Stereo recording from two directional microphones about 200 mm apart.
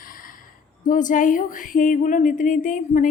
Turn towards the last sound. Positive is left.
turn(degrees=40)  # may be behind; listen again after turning